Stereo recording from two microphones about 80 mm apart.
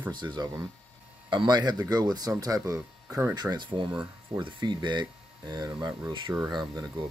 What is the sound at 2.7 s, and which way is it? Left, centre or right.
Speech, right.